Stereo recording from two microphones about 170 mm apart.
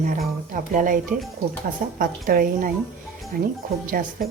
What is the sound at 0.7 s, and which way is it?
Speech, 50° right (ahead or behind).